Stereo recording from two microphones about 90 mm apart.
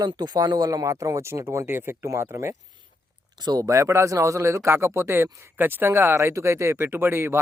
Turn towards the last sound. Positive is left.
turn(degrees=-25)  # may be behind; listen again after turning